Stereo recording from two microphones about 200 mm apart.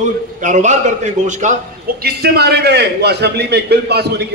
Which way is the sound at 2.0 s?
55° right (ahead or behind).